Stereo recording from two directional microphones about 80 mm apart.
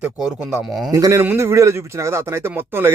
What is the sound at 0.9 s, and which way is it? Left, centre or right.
Speech, right.